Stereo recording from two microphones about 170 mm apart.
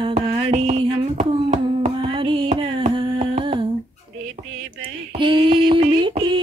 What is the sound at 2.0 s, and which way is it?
Humming, 30° right (ahead or behind).